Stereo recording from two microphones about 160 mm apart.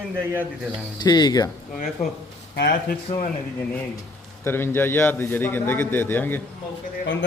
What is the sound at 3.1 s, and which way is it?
Speech, 40° left (ahead or behind).